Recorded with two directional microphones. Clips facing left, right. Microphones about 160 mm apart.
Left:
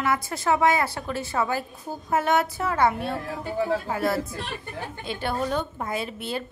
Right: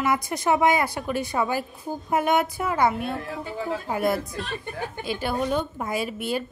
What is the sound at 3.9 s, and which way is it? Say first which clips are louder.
A woman's voice: right 1 dB; 15° right (ahead or behind).